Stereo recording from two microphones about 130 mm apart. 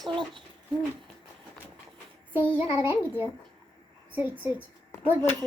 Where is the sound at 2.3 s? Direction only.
15° right (ahead or behind).